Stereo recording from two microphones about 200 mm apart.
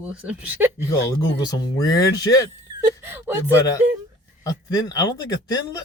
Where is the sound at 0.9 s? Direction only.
15° left (ahead or behind).